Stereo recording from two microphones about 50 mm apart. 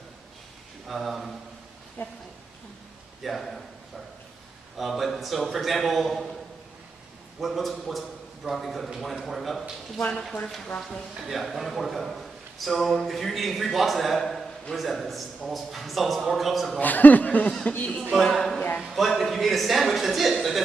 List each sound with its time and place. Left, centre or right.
0.8 s a man's voice: centre
2.0 s a woman's voice: left
3.2 s a man's voice: centre
4.7 s a man's voice: centre
7.3 s a man's voice: centre
9.9 s speech: left
11.2 s a man's voice: centre
16.8 s speech: left
18.2 s a man's voice: centre
19.0 s a man's voice: centre